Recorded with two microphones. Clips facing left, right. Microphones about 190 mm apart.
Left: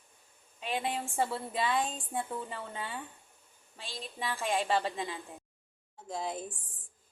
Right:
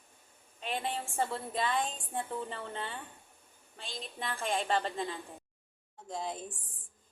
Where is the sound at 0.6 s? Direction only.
10° left (ahead or behind).